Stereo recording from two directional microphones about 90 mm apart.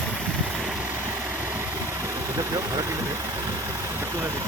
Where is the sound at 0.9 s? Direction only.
25° right (ahead or behind).